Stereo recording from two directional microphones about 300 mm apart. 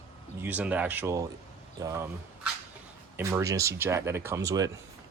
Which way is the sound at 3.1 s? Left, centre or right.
Centre.